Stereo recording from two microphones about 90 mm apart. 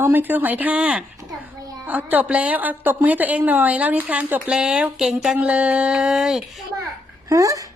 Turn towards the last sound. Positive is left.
turn(degrees=-40)  # may be behind; listen again after turning